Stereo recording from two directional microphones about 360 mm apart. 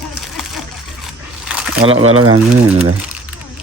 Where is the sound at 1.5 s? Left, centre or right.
Centre.